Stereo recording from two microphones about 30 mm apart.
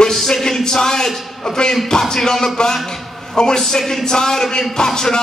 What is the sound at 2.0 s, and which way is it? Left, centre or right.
Speech, centre.